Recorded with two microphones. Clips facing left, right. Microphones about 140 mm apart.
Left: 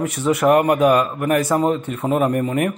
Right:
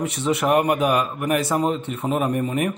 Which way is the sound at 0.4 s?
10° right (ahead or behind).